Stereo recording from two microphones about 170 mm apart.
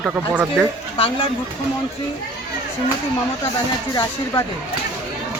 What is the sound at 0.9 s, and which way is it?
Speech, 30° left (ahead or behind).